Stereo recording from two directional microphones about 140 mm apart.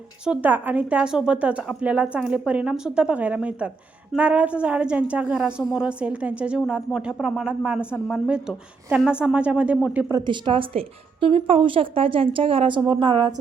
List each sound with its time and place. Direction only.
0.3 s a woman's voice: 10° right (ahead or behind)
10.1 s a woman's voice: 30° right (ahead or behind)